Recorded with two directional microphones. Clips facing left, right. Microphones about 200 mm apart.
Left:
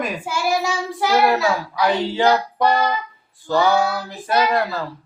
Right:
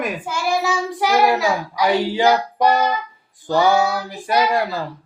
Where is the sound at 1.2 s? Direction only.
15° right (ahead or behind).